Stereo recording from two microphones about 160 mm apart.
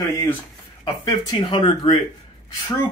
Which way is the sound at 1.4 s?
30° left (ahead or behind).